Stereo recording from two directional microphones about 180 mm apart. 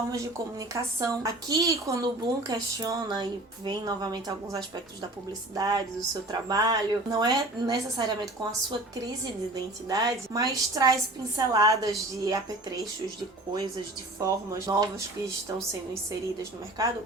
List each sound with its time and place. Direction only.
0.7 s a woman's voice: 15° right (ahead or behind)
9.9 s a woman's voice: 20° right (ahead or behind)
14.2 s a woman's voice: 15° right (ahead or behind)
16.8 s a woman's voice: 20° right (ahead or behind)